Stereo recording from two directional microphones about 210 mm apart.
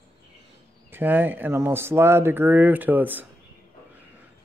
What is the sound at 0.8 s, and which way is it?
Speech, 10° right (ahead or behind).